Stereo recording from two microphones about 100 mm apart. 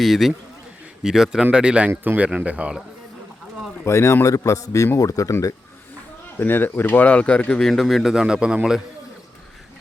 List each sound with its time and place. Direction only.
0.0 s speech: centre (ahead or behind)
3.8 s a man's voice: 25° left (ahead or behind)
6.4 s speech: 20° left (ahead or behind); by 8.8 s 10° right (ahead or behind)